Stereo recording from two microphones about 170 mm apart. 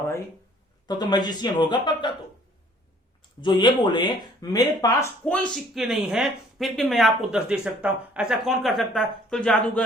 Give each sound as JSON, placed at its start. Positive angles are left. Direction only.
{"t": 0.9, "sound": "speech", "side_deg": 25}
{"t": 3.4, "sound": "speech", "side_deg": 25}